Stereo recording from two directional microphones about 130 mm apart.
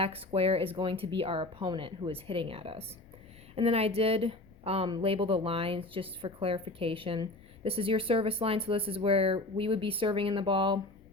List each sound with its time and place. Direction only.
0.0 s a woman's voice: 50° right (ahead or behind)